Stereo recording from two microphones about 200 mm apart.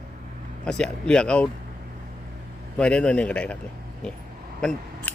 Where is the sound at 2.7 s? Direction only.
5° left (ahead or behind).